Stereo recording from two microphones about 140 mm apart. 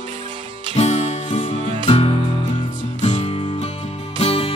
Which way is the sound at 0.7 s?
50° left (ahead or behind).